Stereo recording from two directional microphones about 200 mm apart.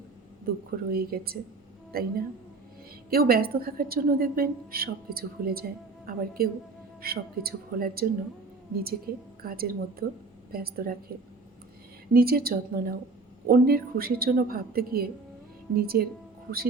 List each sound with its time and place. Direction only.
0.9 s a woman's voice: 50° right (ahead or behind)
12.1 s a woman's voice: 50° right (ahead or behind)